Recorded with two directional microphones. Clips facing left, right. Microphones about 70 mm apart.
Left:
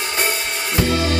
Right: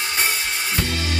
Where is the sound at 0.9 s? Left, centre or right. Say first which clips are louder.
Left 7 dB; left.